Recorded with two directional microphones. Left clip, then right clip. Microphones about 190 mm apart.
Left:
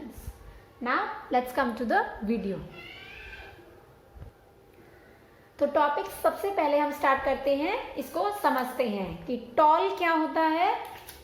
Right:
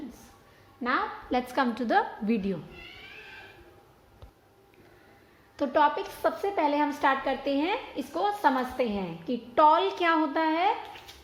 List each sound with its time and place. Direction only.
0.8 s a woman's voice: 50° right (ahead or behind)
5.5 s a woman's voice: 55° right (ahead or behind)